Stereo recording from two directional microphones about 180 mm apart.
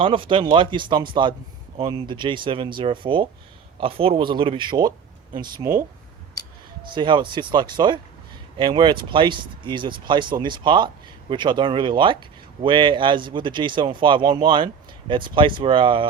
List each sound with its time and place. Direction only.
0.0 s speech: 30° right (ahead or behind)
6.8 s speech: 25° right (ahead or behind)